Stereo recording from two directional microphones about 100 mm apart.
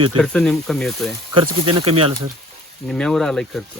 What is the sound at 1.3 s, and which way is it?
Speech, 55° right (ahead or behind).